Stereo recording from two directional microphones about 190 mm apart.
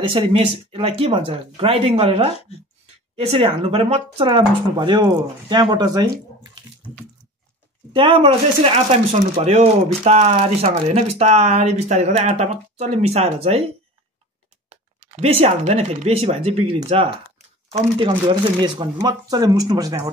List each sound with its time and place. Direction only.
0.0 s speech: 30° right (ahead or behind)
7.9 s speech: 30° right (ahead or behind)
14.7 s speech: 35° right (ahead or behind); by 20.1 s 20° right (ahead or behind)